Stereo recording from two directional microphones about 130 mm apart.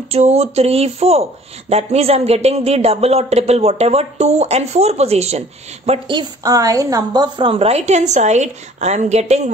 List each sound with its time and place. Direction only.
0.1 s a man's voice: 55° right (ahead or behind)
6.0 s a man's voice: 30° right (ahead or behind); by 9.5 s 60° right (ahead or behind)